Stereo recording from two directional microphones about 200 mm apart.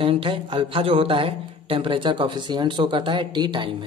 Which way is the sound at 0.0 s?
25° right (ahead or behind).